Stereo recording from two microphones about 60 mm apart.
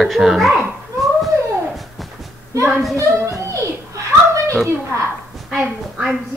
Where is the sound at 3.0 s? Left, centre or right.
Right.